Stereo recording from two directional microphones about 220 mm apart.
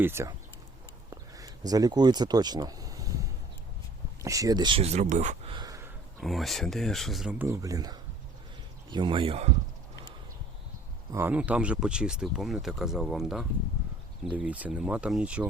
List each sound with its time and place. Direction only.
0.0 s speech: 10° right (ahead or behind)
1.1 s a sound: 15° right (ahead or behind)
4.2 s speech: 15° right (ahead or behind); by 5.5 s 35° right (ahead or behind)
5.5 s a sound: 15° right (ahead or behind)
6.1 s speech: centre (ahead or behind); by 9.5 s 25° right (ahead or behind)
11.1 s speech: 10° right (ahead or behind)